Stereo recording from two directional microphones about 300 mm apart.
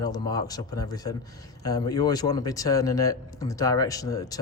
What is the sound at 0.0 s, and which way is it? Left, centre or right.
A man's voice, centre.